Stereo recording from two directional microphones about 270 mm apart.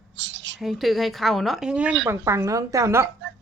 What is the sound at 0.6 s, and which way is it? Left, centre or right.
A woman's voice, centre.